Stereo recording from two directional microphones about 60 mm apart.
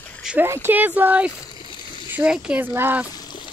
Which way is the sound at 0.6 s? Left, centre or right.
Right.